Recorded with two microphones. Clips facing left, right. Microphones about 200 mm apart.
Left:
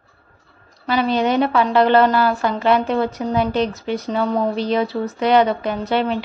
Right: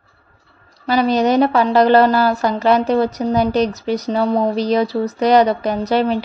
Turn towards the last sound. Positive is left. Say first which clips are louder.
# right 3 dB
turn(degrees=-40)  # may be behind; listen again after turning